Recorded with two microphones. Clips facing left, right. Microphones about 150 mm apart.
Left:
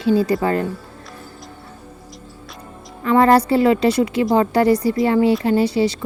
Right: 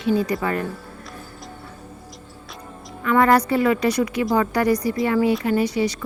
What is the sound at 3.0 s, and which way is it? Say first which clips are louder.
A woman's voice: left 3 dB; 30° left (ahead or behind).